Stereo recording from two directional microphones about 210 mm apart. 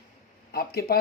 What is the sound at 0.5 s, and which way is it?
Speech, 45° left (ahead or behind).